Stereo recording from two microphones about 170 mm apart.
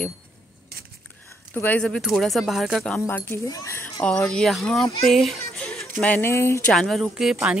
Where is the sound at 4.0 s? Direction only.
5° left (ahead or behind).